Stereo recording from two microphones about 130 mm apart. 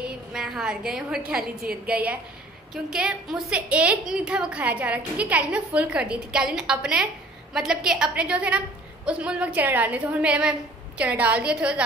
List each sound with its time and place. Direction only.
0.0 s a woman's voice: 5° right (ahead or behind)